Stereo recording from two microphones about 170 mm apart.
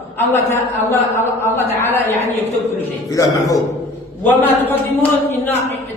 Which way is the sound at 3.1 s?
20° left (ahead or behind).